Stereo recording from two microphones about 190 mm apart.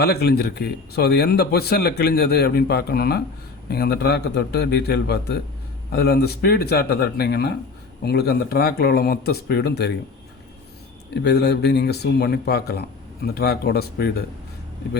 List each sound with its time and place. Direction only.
0.0 s speech: 55° left (ahead or behind)
11.1 s speech: 65° left (ahead or behind)